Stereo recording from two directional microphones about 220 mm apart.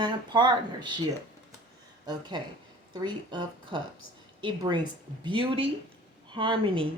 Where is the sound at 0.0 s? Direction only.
20° right (ahead or behind).